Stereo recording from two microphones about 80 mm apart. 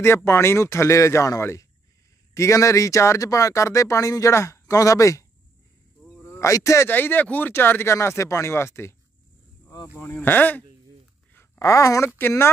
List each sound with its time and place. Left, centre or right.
0.0 s speech: left
6.2 s a man's voice: left
6.9 s speech: left
10.2 s speech: left
11.6 s speech: left
12.2 s speech: left